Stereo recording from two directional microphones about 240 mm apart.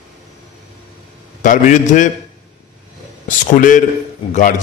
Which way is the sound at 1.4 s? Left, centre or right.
Left.